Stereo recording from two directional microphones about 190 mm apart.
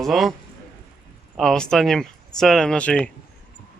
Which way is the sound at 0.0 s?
Centre (ahead or behind).